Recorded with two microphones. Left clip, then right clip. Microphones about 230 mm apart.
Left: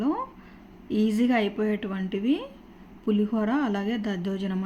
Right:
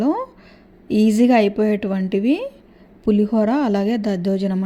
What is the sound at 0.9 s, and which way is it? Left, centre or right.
A woman's voice, right.